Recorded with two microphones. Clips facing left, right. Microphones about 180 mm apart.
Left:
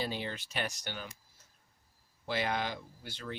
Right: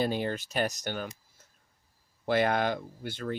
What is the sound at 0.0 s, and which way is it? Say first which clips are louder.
Speech: right 8 dB; 50° right (ahead or behind).